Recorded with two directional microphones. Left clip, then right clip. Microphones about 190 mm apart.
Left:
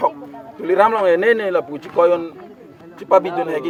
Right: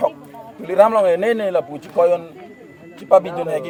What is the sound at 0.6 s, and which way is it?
A man's voice, 20° left (ahead or behind).